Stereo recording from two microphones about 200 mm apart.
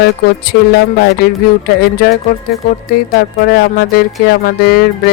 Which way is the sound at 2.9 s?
50° left (ahead or behind).